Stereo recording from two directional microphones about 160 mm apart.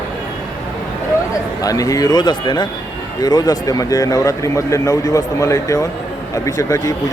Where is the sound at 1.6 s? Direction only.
20° left (ahead or behind).